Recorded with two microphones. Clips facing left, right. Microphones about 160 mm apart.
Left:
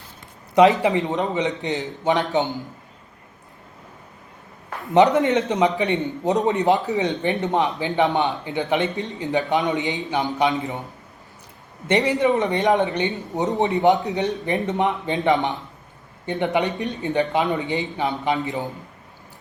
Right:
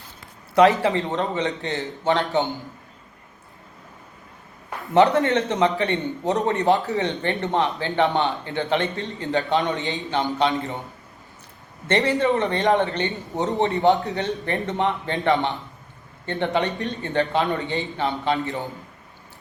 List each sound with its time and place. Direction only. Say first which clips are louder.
0.5 s a man's voice: left 1 dB; 20° left (ahead or behind)
4.9 s a man's voice: left 1 dB; 20° left (ahead or behind)
11.9 s a man's voice: left 1 dB; 15° left (ahead or behind)